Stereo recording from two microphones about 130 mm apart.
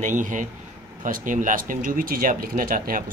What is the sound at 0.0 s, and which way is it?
A man's voice, 80° right.